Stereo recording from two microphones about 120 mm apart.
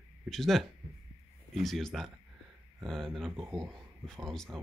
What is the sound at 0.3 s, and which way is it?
Speech, centre (ahead or behind).